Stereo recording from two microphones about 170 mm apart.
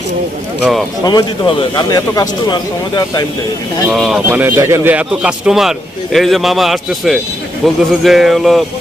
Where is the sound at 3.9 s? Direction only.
Centre (ahead or behind).